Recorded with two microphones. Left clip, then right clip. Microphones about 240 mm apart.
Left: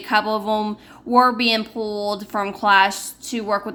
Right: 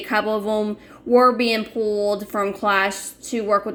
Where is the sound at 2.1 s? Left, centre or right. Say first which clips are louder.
Right 2 dB; centre.